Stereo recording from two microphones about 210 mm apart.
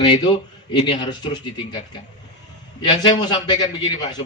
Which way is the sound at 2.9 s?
20° left (ahead or behind).